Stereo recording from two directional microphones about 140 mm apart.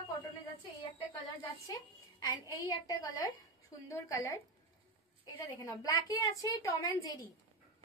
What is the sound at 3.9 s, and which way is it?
Speech, 25° left (ahead or behind).